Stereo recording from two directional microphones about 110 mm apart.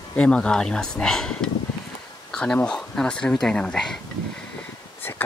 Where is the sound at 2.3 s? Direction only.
5° left (ahead or behind).